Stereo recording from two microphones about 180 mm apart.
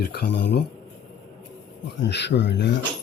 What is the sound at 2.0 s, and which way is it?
Speech, 70° left (ahead or behind).